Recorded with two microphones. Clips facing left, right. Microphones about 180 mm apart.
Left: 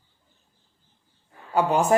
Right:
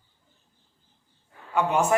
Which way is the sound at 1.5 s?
35° left (ahead or behind).